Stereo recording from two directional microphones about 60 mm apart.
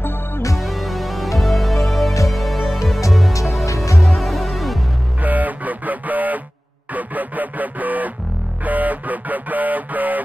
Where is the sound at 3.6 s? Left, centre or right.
Left.